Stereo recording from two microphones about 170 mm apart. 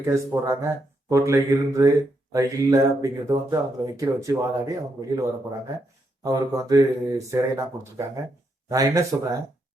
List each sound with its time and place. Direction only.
0.0 s speech: 15° right (ahead or behind)
6.2 s speech: 20° right (ahead or behind)